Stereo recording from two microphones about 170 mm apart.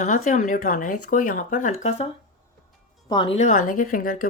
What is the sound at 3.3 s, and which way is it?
Speech, 45° left (ahead or behind).